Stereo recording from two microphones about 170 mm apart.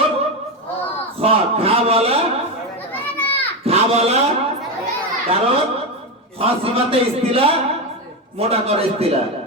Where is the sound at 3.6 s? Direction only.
35° right (ahead or behind).